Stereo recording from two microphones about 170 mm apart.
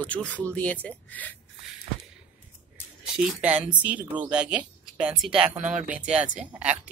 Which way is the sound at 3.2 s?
5° right (ahead or behind).